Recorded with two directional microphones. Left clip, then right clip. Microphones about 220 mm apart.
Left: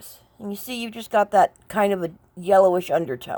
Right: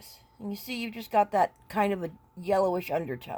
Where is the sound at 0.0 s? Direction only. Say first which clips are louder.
Left 5 dB; 20° left (ahead or behind).